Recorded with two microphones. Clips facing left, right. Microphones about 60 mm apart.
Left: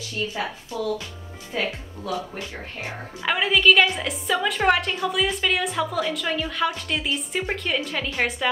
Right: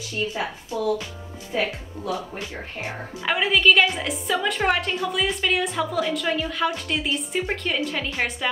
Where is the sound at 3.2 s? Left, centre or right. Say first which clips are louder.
Even; centre.